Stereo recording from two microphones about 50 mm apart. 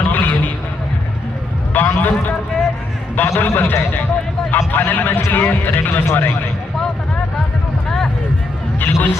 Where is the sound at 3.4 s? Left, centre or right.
Left.